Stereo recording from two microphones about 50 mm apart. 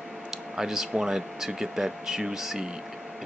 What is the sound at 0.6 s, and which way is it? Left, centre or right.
Speech, centre.